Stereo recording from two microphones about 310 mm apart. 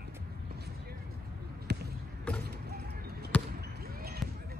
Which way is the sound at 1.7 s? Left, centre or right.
Right.